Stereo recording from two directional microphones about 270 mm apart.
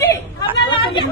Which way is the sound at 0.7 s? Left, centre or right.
Centre.